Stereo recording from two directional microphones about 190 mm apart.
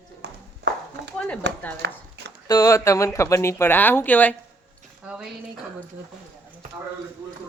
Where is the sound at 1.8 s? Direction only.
65° right (ahead or behind).